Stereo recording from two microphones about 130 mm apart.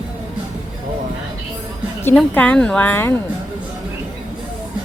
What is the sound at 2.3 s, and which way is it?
Speech, 10° left (ahead or behind).